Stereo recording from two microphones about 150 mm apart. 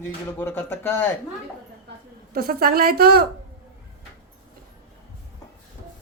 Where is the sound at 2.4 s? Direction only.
85° right.